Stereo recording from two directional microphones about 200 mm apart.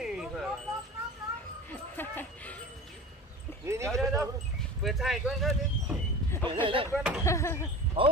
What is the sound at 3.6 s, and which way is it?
Speech, 15° right (ahead or behind).